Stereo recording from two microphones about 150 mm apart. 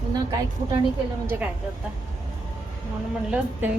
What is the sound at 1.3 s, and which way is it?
Speech, 15° right (ahead or behind).